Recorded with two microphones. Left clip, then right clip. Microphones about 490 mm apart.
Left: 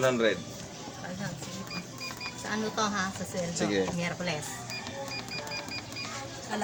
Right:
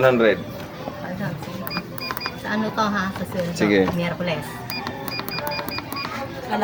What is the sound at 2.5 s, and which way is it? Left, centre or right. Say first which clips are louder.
Speech: right 7 dB; left.